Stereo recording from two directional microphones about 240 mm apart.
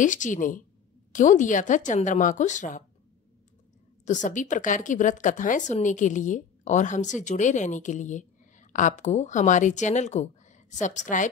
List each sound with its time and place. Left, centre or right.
0.0 s a woman's voice: left
4.0 s a woman's voice: left